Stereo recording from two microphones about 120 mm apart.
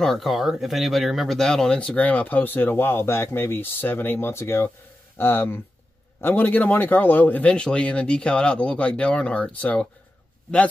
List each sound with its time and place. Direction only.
0.0 s speech: centre (ahead or behind)